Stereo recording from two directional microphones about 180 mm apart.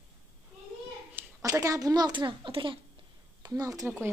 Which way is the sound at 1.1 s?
20° right (ahead or behind).